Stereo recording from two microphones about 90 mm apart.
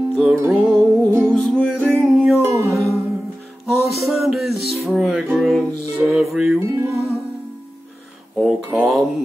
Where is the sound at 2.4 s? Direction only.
30° right (ahead or behind).